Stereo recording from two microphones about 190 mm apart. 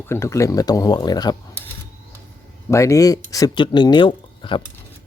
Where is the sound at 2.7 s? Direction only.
15° left (ahead or behind).